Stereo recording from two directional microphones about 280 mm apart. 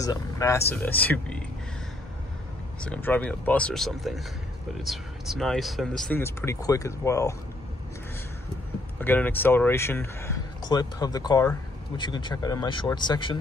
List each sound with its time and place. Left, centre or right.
0.0 s speech: centre
2.8 s speech: centre
9.0 s speech: centre